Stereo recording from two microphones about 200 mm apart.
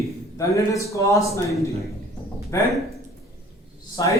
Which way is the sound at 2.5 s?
15° left (ahead or behind).